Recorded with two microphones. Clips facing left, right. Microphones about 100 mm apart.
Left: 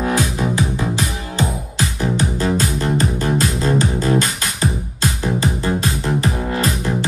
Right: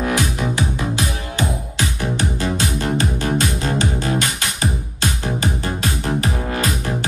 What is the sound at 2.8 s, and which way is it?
Music, 35° left (ahead or behind).